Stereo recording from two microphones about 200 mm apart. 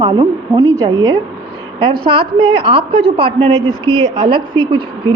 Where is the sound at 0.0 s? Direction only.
20° right (ahead or behind).